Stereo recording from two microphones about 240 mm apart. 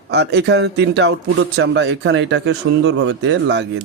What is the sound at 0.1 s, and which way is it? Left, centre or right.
A man's voice, right.